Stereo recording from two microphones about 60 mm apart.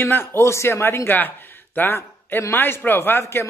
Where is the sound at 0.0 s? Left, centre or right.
Left.